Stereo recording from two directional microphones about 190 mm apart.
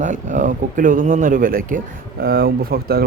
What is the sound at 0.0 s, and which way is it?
Speech, 40° right (ahead or behind).